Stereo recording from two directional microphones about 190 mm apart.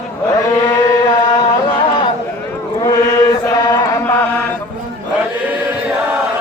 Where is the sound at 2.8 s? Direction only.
20° left (ahead or behind).